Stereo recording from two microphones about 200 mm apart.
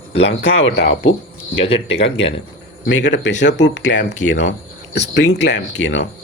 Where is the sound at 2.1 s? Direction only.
70° left (ahead or behind).